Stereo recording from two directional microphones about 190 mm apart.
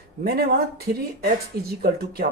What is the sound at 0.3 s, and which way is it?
Speech, 55° right (ahead or behind).